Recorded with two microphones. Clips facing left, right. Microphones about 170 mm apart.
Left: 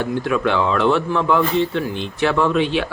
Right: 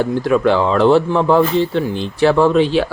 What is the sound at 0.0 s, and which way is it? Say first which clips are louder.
Speech: right 5 dB; 35° right (ahead or behind).